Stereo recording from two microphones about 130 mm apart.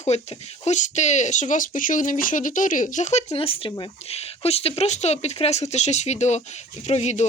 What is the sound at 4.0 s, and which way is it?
Speech, 55° left (ahead or behind).